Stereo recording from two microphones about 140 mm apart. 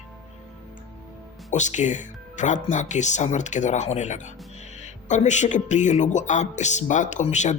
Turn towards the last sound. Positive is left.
turn(degrees=55)  # may be behind; listen again after turning